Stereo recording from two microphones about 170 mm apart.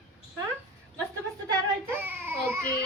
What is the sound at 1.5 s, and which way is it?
Speech, 10° right (ahead or behind).